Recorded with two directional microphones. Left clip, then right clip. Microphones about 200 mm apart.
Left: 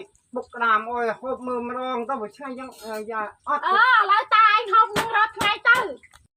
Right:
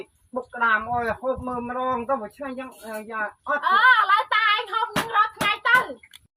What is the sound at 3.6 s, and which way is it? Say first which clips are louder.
Speech: right 1 dB; 10° left (ahead or behind).